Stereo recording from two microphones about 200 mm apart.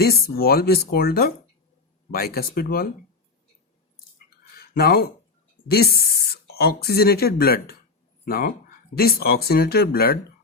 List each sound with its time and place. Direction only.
0.0 s speech: 50° left (ahead or behind)
4.5 s a sound: 50° left (ahead or behind)
6.3 s speech: 50° left (ahead or behind)